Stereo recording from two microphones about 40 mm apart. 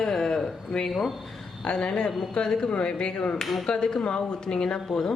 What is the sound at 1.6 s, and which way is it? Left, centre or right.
A woman's voice, left.